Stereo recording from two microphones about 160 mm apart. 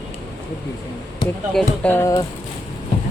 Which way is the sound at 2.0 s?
20° left (ahead or behind).